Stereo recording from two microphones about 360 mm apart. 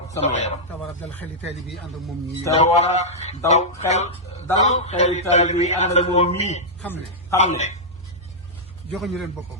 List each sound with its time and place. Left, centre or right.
0.2 s a man's voice: centre
0.7 s speech: centre
2.4 s a man's voice: centre
6.8 s a man's voice: centre
7.3 s a man's voice: centre
8.9 s speech: centre